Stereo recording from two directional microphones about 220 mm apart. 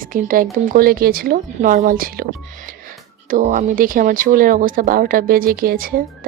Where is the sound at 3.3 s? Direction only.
35° right (ahead or behind).